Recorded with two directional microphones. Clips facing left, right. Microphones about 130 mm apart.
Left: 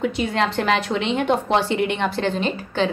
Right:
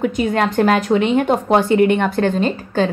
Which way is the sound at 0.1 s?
45° right (ahead or behind).